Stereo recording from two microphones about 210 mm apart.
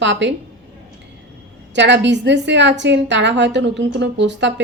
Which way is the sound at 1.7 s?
60° right (ahead or behind).